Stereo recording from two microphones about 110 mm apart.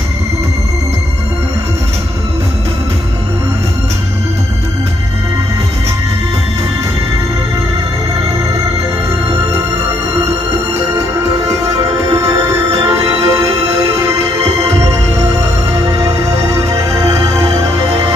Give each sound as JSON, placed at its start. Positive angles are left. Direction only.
{"t": 12.2, "sound": "music", "side_deg": -35}
{"t": 12.8, "sound": "music", "side_deg": -60}
{"t": 13.3, "sound": "music", "side_deg": -35}